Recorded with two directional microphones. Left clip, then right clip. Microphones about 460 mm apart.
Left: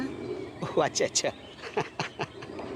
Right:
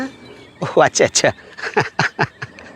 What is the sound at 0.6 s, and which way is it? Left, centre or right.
Speech, right.